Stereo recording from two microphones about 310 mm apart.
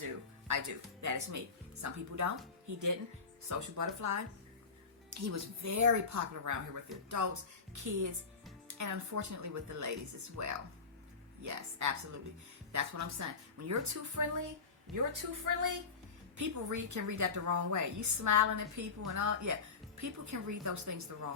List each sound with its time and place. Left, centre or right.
0.0 s a woman's voice: right
7.7 s a woman's voice: right
14.9 s a woman's voice: right
16.4 s a woman's voice: right